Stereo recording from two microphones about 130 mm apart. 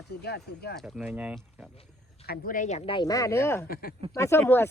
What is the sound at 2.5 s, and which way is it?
Speech, 75° left (ahead or behind).